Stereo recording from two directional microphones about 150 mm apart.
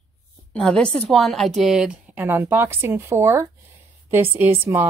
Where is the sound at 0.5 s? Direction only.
5° left (ahead or behind).